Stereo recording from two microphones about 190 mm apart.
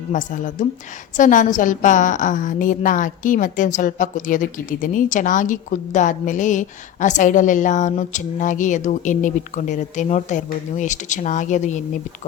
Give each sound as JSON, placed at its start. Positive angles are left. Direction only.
{"t": 0.1, "sound": "a woman's voice", "side_deg": 40}